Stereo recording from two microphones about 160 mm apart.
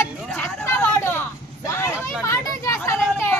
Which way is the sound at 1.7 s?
20° left (ahead or behind).